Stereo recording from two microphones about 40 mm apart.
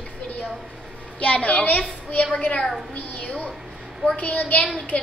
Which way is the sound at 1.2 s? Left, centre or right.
Left.